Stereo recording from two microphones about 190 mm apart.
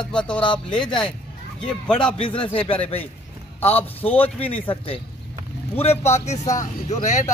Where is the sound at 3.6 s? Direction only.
10° left (ahead or behind).